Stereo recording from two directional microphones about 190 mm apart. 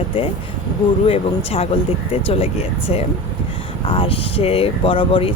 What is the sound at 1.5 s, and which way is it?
Speech, 30° left (ahead or behind).